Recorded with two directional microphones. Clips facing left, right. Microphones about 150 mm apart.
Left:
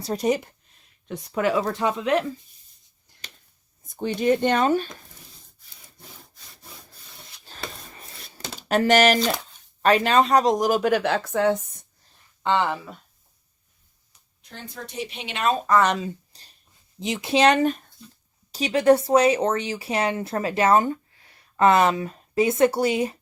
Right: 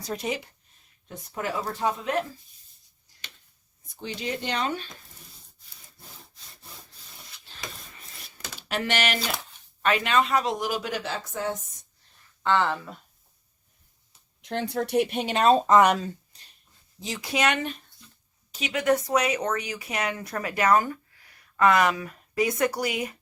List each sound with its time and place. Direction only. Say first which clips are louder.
0.0 s speech: left 7 dB; 35° left (ahead or behind)
1.0 s speech: left 8 dB; 90° left
3.8 s speech: left 11 dB; 50° left (ahead or behind)
8.6 s speech: left 10 dB; 45° left (ahead or behind); by 11.9 s 65° left (ahead or behind)
12.4 s speech: left 1 dB; 15° left (ahead or behind)
14.4 s a woman's voice: right 11 dB; 85° right; by 15.9 s 20° right (ahead or behind)
16.3 s a sound: left 3 dB; 35° left (ahead or behind)
17.0 s speech: left 7 dB; 20° left (ahead or behind); by 17.9 s 45° left (ahead or behind)
18.5 s speech: left 6 dB; 35° left (ahead or behind)